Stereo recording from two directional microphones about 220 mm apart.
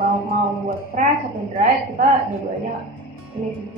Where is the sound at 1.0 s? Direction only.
35° right (ahead or behind).